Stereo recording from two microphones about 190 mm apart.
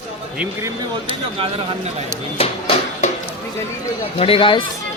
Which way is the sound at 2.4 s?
30° left (ahead or behind).